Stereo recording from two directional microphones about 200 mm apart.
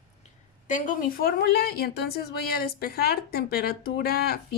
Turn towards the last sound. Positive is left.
turn(degrees=50)  # may be behind; listen again after turning